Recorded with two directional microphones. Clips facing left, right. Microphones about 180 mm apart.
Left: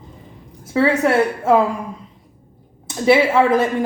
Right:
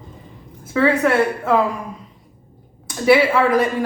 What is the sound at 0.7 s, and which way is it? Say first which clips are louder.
Speech: even; 30° left (ahead or behind).